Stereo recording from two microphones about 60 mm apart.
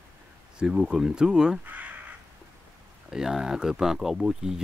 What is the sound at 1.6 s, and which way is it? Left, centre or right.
Crow, right.